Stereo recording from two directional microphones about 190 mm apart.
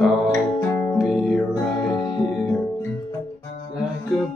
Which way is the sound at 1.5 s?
20° left (ahead or behind).